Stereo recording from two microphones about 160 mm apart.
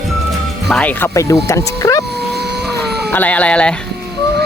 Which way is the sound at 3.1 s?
10° left (ahead or behind).